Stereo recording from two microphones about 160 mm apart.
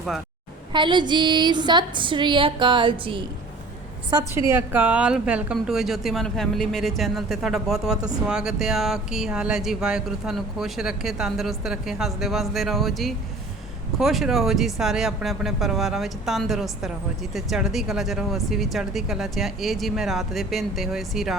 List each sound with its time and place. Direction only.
0.7 s a woman's voice: 30° right (ahead or behind)
4.1 s speech: 20° right (ahead or behind); by 21.3 s centre (ahead or behind)